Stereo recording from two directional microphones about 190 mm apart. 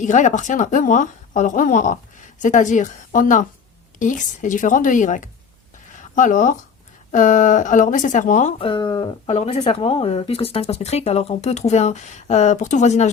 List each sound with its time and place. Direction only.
0.0 s speech: 40° left (ahead or behind)